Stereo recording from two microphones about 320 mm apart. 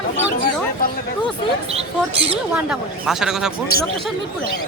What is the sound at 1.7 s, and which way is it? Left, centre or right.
Speech, centre.